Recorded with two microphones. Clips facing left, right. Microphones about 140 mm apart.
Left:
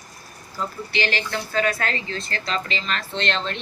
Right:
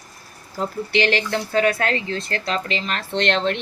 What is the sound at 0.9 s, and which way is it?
A woman's voice, 65° right (ahead or behind).